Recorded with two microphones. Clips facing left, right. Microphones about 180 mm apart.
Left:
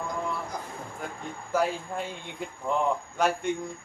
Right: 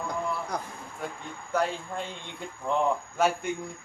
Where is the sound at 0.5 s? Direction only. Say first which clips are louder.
Right 3 dB; 65° right (ahead or behind).